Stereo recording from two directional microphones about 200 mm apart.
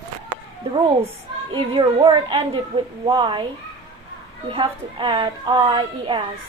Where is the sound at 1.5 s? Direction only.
25° right (ahead or behind).